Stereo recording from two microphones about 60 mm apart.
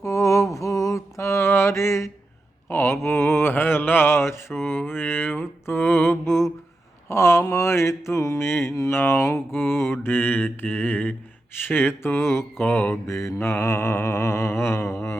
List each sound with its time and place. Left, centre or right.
0.0 s mantra: left
2.6 s a sound: left
7.1 s mantra: left
8.4 s mantra: left
11.5 s speech: left
12.6 s mantra: left
13.1 s mantra: left